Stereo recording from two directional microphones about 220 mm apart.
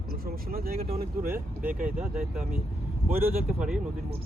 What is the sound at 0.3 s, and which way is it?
Speech, 40° right (ahead or behind).